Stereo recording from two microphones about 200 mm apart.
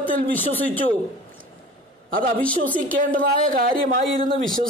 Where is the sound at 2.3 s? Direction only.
5° left (ahead or behind).